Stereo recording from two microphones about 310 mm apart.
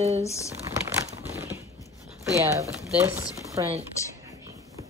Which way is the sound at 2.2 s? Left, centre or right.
Centre.